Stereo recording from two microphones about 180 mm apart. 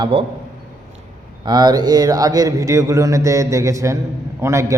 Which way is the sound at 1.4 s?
25° right (ahead or behind).